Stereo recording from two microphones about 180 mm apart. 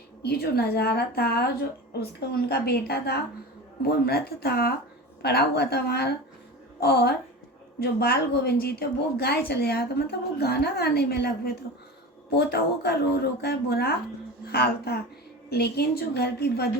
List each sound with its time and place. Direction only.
0.2 s a woman's voice: 60° left (ahead or behind)